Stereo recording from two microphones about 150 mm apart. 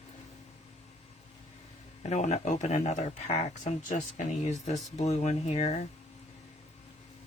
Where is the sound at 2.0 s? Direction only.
50° left (ahead or behind).